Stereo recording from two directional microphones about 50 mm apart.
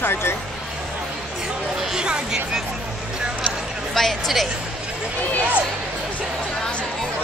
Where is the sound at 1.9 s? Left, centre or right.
Centre.